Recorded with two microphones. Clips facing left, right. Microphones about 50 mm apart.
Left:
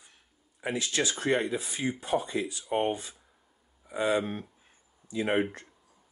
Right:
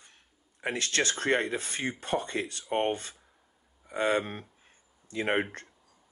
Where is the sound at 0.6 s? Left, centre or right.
Right.